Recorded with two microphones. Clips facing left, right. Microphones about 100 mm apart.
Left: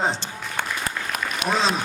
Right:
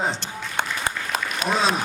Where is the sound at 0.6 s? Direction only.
25° right (ahead or behind).